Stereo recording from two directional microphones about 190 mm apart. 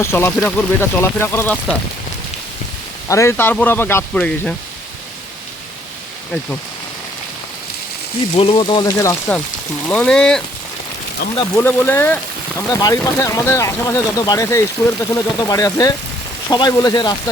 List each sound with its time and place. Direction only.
0.0 s speech: 10° left (ahead or behind)
3.1 s speech: 15° left (ahead or behind)
8.4 s speech: 30° left (ahead or behind)